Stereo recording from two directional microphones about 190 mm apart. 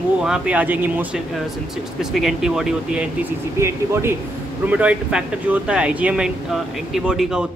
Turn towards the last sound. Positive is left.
turn(degrees=-5)  # may be behind; listen again after turning